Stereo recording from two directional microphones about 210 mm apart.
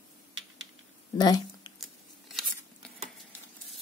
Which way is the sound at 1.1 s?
20° left (ahead or behind).